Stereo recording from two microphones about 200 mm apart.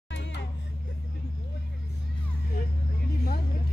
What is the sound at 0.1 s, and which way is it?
Music, 60° left (ahead or behind).